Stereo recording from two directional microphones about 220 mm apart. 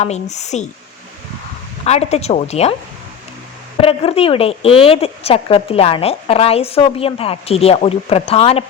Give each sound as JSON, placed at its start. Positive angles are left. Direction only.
{"t": 0.0, "sound": "speech", "side_deg": 30}
{"t": 1.8, "sound": "a woman's voice", "side_deg": 30}
{"t": 3.8, "sound": "a woman's voice", "side_deg": 25}